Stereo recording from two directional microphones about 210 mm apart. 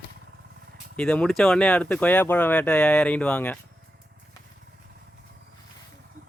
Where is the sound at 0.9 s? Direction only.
5° left (ahead or behind).